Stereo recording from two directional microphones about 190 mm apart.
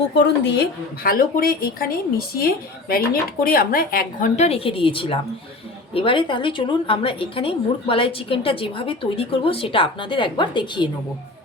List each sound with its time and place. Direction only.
0.1 s a woman's voice: 65° left (ahead or behind); by 10.8 s 25° left (ahead or behind)